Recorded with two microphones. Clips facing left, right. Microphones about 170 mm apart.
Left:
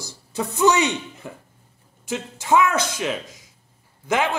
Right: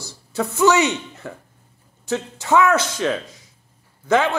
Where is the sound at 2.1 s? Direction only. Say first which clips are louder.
Right 1 dB; 10° left (ahead or behind).